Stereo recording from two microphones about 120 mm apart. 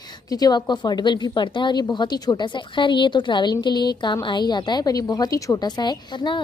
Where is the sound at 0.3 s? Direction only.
35° left (ahead or behind).